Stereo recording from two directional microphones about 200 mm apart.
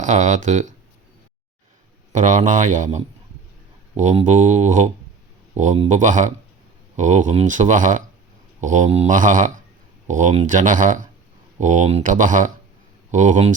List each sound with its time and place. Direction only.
0.0 s speech: 35° right (ahead or behind)
2.1 s speech: 35° right (ahead or behind)